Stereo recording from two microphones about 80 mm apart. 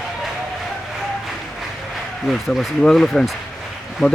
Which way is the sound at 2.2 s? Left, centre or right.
Centre.